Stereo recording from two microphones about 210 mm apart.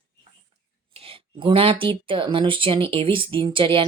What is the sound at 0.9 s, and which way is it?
A woman's voice, 25° right (ahead or behind).